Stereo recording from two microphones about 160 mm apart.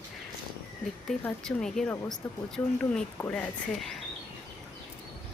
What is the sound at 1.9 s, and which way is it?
Speech, 15° left (ahead or behind).